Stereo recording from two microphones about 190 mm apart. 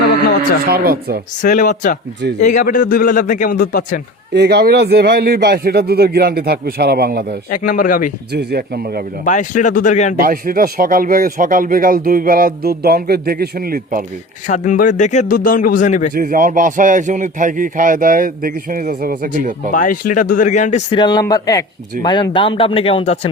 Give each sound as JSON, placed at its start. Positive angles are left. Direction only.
{"t": 0.6, "sound": "speech", "side_deg": -55}
{"t": 1.4, "sound": "a man's voice", "side_deg": 40}
{"t": 4.4, "sound": "speech", "side_deg": -60}
{"t": 7.5, "sound": "a man's voice", "side_deg": 50}
{"t": 8.3, "sound": "speech", "side_deg": -60}
{"t": 9.2, "sound": "a man's voice", "side_deg": 40}
{"t": 10.2, "sound": "speech", "side_deg": -45}
{"t": 14.4, "sound": "a man's voice", "side_deg": 40}
{"t": 16.1, "sound": "speech", "side_deg": -45}
{"t": 19.7, "sound": "a man's voice", "side_deg": 45}
{"t": 20.9, "sound": "a man's voice", "side_deg": 25}